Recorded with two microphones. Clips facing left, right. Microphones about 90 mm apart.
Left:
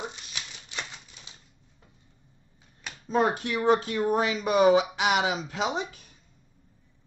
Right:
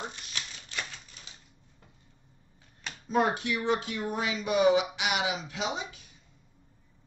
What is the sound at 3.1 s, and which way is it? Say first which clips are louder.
Speech: left 2 dB; 35° left (ahead or behind).